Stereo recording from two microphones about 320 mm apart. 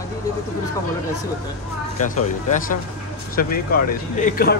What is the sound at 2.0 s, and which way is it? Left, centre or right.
Speech, left.